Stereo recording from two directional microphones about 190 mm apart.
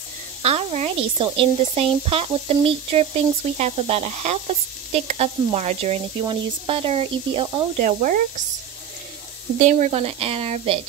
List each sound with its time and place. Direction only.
0.4 s speech: 35° right (ahead or behind)
2.0 s sizzle: 30° right (ahead or behind)
3.5 s speech: 35° right (ahead or behind)
7.8 s speech: 40° right (ahead or behind)
9.6 s speech: 40° right (ahead or behind)